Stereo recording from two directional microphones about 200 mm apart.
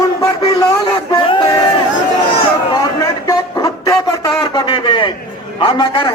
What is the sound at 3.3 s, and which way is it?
A man's voice, 15° left (ahead or behind).